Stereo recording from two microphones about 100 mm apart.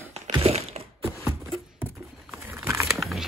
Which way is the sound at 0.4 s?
90° right.